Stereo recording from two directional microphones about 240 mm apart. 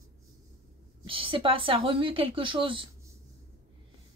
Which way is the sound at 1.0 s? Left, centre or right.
Right.